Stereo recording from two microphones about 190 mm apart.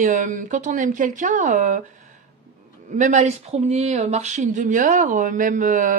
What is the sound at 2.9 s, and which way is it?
Speech, 40° right (ahead or behind).